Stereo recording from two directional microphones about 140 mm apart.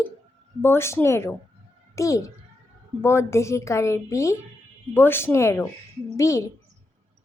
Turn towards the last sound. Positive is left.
turn(degrees=20)  # may be behind; listen again after turning